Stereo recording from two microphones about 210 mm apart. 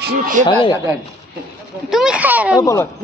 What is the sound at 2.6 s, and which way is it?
Speech, 15° left (ahead or behind).